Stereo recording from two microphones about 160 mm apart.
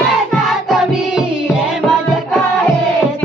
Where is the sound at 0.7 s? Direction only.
5° right (ahead or behind).